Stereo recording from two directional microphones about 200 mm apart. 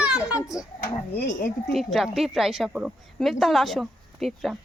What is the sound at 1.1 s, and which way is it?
Speech, 60° left (ahead or behind).